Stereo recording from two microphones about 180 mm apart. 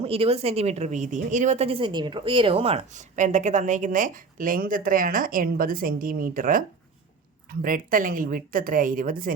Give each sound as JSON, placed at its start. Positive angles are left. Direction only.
{"t": 0.0, "sound": "a woman's voice", "side_deg": -35}